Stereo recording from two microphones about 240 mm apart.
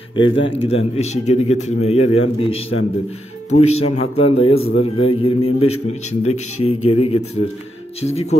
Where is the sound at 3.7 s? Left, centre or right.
Left.